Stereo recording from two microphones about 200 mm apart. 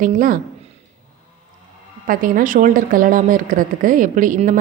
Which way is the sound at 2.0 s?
45° right (ahead or behind).